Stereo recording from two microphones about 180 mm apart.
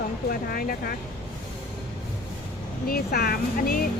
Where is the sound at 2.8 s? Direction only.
60° left (ahead or behind).